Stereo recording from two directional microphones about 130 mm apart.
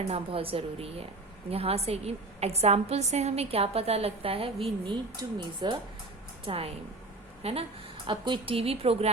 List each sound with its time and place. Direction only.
0.1 s a woman's voice: 45° right (ahead or behind)
4.9 s speech: 35° right (ahead or behind)
6.4 s a woman's voice: 45° right (ahead or behind)
8.0 s a woman's voice: 35° right (ahead or behind)